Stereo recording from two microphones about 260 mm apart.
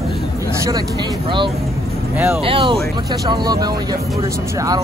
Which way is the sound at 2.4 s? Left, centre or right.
Centre.